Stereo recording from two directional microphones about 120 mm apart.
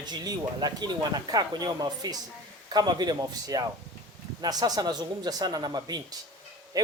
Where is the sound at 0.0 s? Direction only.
35° right (ahead or behind).